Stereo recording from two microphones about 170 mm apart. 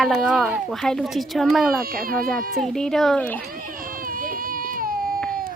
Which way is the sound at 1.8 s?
60° right (ahead or behind).